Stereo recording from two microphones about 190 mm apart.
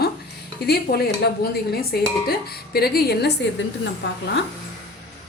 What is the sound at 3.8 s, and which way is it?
Speech, 70° left (ahead or behind).